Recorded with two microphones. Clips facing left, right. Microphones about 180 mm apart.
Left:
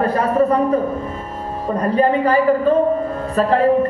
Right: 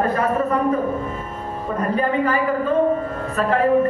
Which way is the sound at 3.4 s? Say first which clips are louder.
Left 4 dB; 35° left (ahead or behind).